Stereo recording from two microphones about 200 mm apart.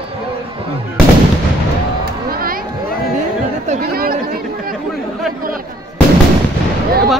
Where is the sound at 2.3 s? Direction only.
45° right (ahead or behind).